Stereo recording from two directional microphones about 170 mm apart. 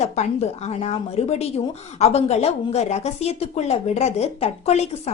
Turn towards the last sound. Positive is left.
turn(degrees=40)  # may be behind; listen again after turning